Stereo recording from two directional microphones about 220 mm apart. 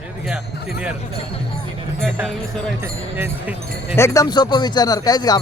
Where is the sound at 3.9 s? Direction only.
15° left (ahead or behind).